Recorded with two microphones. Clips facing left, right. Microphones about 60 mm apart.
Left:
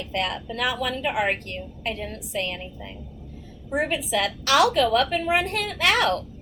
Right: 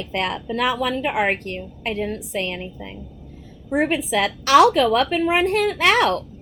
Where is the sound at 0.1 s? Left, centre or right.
Right.